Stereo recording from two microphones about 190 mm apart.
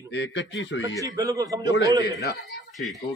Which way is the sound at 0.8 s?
15° right (ahead or behind).